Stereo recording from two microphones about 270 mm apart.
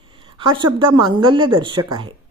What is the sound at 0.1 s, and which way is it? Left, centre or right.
Speech, centre.